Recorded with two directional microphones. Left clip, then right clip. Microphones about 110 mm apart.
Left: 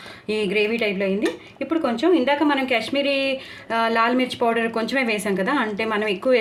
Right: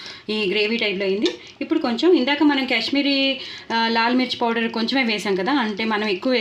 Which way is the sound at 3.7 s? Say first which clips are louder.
Even; 85° right.